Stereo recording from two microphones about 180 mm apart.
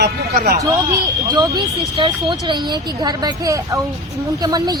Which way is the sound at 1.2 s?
20° right (ahead or behind).